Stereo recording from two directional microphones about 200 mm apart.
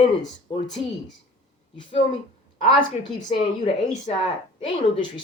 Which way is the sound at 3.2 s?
35° left (ahead or behind).